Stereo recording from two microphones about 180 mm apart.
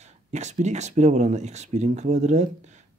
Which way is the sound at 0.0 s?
40° right (ahead or behind).